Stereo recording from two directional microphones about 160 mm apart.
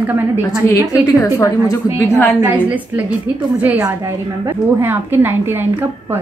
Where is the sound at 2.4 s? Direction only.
10° right (ahead or behind).